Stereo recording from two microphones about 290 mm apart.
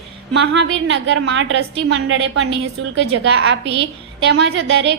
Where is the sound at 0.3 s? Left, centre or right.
Right.